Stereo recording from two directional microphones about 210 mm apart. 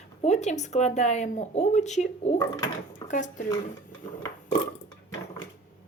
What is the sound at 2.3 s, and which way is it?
Speech, 15° left (ahead or behind).